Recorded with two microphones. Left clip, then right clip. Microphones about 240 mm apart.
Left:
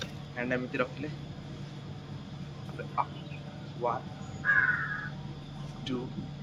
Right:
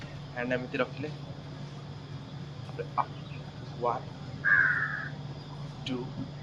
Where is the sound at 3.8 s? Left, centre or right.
Centre.